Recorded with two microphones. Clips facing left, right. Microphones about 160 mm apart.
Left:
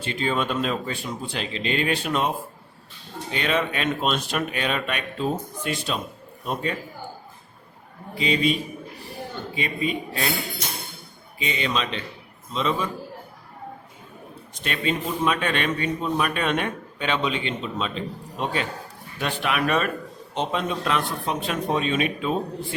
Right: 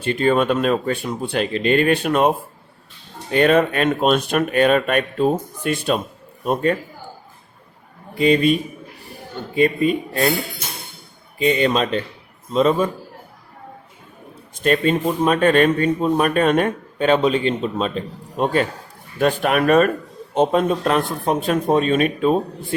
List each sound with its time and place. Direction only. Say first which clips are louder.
0.0 s speech: right 8 dB; 55° right (ahead or behind)
3.3 s a man's voice: right 10 dB; 50° right (ahead or behind)
8.2 s speech: right 7 dB; 50° right (ahead or behind)
9.6 s speech: right 11 dB; 50° right (ahead or behind)
11.3 s speech: right 9 dB; 50° right (ahead or behind)
14.6 s speech: right 9 dB; 45° right (ahead or behind)